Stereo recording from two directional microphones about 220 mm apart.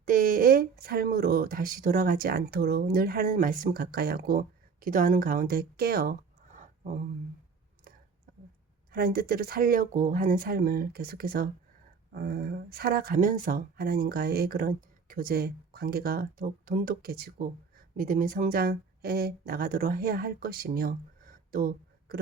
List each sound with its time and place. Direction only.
0.0 s speech: 40° right (ahead or behind)
8.9 s speech: 45° right (ahead or behind)